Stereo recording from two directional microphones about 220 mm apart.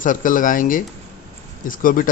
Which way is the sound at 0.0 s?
35° left (ahead or behind).